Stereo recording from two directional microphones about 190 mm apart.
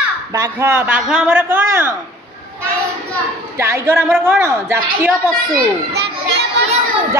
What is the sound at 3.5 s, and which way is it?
A man's voice, 15° right (ahead or behind).